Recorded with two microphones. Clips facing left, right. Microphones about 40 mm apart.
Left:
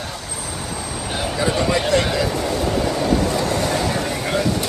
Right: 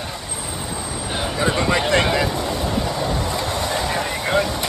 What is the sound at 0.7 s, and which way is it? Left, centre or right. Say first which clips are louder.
Vehicle: even; right.